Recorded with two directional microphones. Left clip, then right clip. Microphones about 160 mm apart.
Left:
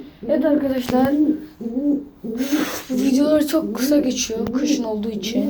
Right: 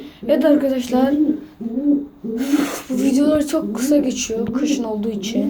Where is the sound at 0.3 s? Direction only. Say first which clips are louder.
Right 3 dB; 25° right (ahead or behind).